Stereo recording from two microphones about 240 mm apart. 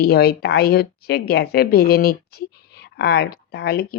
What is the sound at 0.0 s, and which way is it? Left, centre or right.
A woman's voice, left.